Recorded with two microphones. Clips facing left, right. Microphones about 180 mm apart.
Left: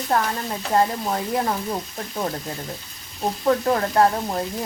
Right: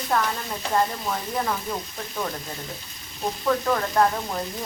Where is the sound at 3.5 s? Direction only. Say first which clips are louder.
Left 3 dB; 35° left (ahead or behind).